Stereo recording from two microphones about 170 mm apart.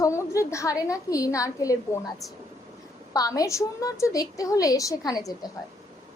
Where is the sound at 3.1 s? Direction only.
20° left (ahead or behind).